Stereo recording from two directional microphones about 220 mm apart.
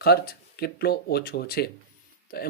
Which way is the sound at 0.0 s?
45° left (ahead or behind).